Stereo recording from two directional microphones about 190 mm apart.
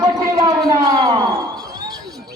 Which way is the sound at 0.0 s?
20° right (ahead or behind).